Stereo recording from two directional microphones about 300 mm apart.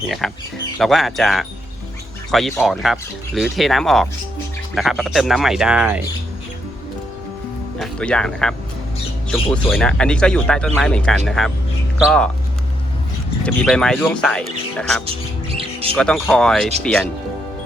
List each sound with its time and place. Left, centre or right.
0.2 s speech: centre
7.8 s speech: centre
13.4 s speech: centre
15.0 s a sound: centre
16.0 s speech: centre